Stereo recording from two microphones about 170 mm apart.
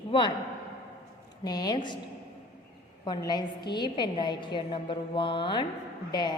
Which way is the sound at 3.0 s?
25° left (ahead or behind).